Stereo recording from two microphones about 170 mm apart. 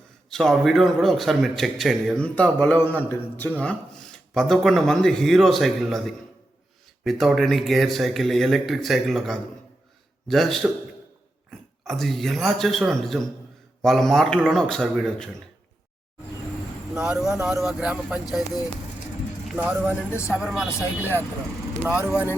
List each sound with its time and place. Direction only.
0.3 s a man's voice: centre (ahead or behind)
11.9 s a man's voice: centre (ahead or behind)
16.9 s a man's voice: 5° right (ahead or behind)
19.5 s speech: 10° right (ahead or behind)
20.1 s speech: 15° left (ahead or behind)
20.3 s a man's voice: 5° right (ahead or behind)